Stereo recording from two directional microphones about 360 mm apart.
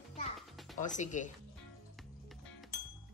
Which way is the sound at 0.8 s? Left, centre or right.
Centre.